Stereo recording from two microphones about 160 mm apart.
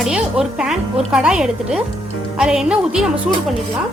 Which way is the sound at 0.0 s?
5° right (ahead or behind).